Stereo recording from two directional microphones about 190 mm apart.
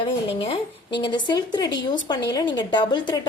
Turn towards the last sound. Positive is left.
turn(degrees=25)  # may be behind; listen again after turning